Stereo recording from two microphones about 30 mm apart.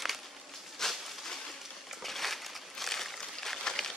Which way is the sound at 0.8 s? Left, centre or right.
Centre.